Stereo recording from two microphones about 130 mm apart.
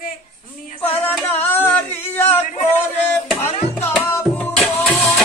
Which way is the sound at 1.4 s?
15° left (ahead or behind).